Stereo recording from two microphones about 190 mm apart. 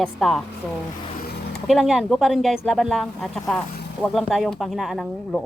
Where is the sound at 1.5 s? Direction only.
Centre (ahead or behind).